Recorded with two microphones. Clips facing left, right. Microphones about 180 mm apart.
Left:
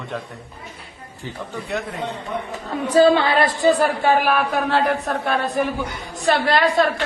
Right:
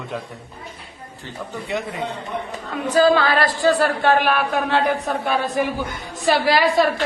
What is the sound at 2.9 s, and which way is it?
A woman's voice, 30° left (ahead or behind).